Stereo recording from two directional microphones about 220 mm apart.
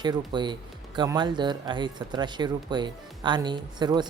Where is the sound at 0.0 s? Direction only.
20° right (ahead or behind).